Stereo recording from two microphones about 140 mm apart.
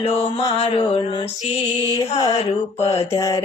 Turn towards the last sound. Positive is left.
turn(degrees=25)  # may be behind; listen again after turning